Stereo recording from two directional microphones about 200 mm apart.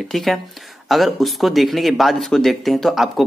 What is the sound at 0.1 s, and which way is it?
Speech, centre (ahead or behind).